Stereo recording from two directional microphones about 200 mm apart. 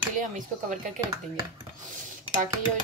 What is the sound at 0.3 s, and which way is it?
Speech, 40° right (ahead or behind).